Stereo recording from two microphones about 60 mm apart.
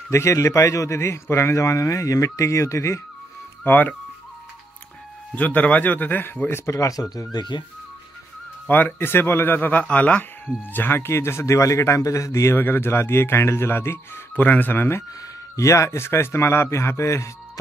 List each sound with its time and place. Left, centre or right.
0.1 s a man's voice: left
3.6 s speech: left
5.3 s speech: left
6.7 s speech: left
8.6 s speech: left
10.7 s a man's voice: left
12.5 s speech: left
14.4 s speech: left
15.5 s speech: left